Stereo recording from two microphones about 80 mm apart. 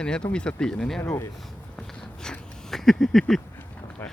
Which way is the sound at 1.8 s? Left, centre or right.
Centre.